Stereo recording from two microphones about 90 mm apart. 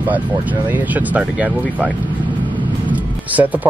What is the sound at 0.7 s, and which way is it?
Speech, 20° right (ahead or behind).